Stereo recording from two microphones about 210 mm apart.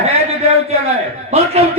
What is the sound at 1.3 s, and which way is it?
Speech, 30° right (ahead or behind).